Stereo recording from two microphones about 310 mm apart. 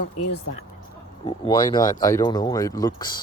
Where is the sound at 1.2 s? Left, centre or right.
Centre.